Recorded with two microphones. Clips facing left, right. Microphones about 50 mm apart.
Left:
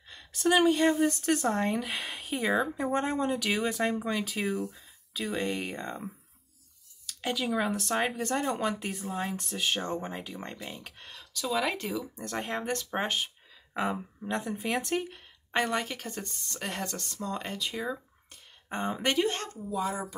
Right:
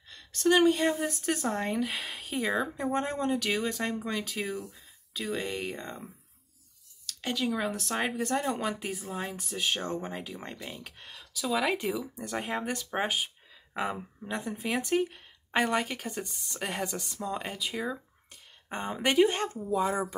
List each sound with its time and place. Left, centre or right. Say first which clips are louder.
0.1 s speech: right 1 dB; centre
19.7 s speech: right 3 dB; right